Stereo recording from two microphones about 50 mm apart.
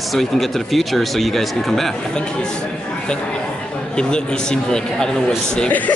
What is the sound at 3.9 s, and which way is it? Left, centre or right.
A man's voice, centre.